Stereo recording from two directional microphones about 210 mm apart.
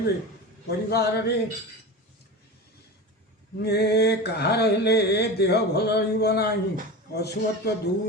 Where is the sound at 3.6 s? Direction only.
50° left (ahead or behind).